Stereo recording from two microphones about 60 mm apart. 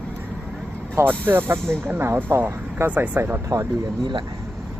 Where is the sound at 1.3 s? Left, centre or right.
Right.